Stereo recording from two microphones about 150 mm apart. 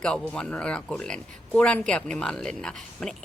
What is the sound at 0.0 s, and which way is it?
Speech, 5° left (ahead or behind).